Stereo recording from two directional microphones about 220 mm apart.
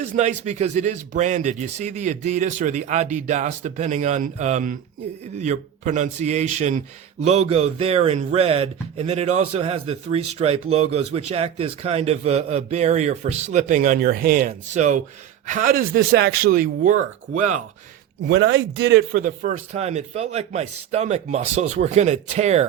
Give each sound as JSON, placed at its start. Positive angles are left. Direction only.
{"t": 0.0, "sound": "speech", "side_deg": -30}
{"t": 18.2, "sound": "speech", "side_deg": -55}
{"t": 19.2, "sound": "speech", "side_deg": -35}